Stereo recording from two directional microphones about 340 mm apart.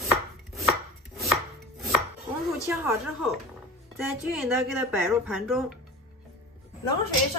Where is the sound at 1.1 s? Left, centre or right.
Centre.